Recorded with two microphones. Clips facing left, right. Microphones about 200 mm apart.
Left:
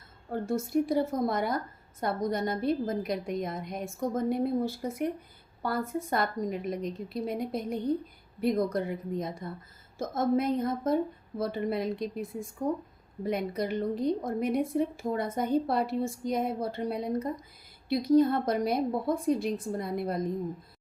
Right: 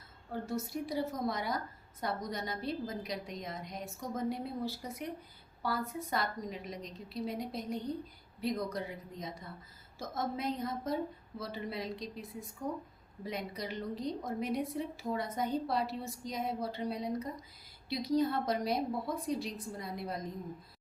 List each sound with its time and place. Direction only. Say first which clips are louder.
0.3 s a woman's voice: left 6 dB; 50° left (ahead or behind)